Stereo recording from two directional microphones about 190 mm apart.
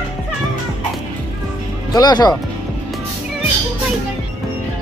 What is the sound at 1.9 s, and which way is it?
Speech, 20° left (ahead or behind).